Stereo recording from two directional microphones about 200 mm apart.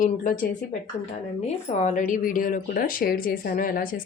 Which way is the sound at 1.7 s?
35° left (ahead or behind).